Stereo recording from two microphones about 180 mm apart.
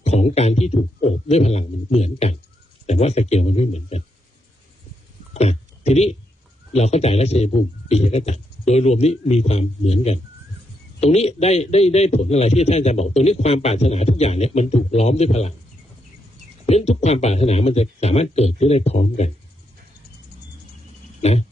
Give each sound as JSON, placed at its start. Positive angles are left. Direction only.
{"t": 0.0, "sound": "a man's voice", "side_deg": 35}
{"t": 5.3, "sound": "a man's voice", "side_deg": 35}
{"t": 16.6, "sound": "a man's voice", "side_deg": 35}
{"t": 21.2, "sound": "speech", "side_deg": 35}